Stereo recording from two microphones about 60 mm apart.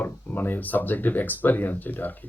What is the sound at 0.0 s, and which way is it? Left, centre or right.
Speech, left.